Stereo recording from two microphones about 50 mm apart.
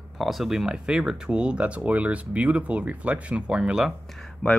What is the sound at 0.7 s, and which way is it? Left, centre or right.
Speech, centre.